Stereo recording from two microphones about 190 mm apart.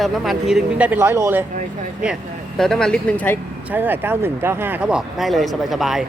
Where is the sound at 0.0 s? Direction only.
Centre (ahead or behind).